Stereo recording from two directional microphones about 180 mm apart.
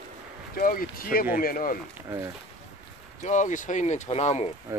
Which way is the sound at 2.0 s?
15° right (ahead or behind).